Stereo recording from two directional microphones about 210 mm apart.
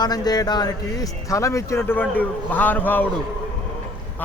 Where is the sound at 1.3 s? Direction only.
15° left (ahead or behind).